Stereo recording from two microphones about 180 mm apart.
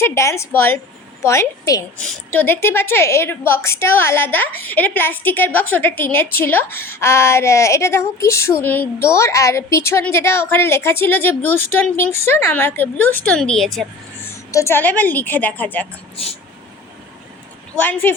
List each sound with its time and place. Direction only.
0.0 s a woman's voice: 15° left (ahead or behind)
2.0 s a woman's voice: 5° left (ahead or behind)
14.5 s a woman's voice: 15° left (ahead or behind)
16.1 s speech: 35° left (ahead or behind)
17.7 s a woman's voice: 10° left (ahead or behind)